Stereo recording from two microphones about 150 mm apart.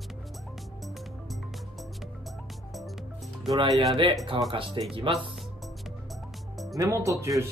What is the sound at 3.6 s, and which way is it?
Speech, 30° right (ahead or behind).